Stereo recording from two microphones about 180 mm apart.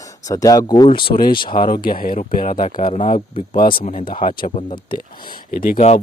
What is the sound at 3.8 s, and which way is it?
Speech, 45° left (ahead or behind).